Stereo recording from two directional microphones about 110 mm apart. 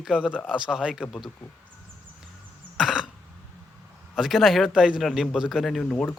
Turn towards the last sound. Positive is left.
turn(degrees=10)  # may be behind; listen again after turning